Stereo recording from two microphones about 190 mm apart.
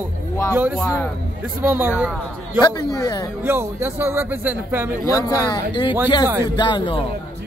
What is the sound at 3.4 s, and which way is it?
Speech, 10° right (ahead or behind).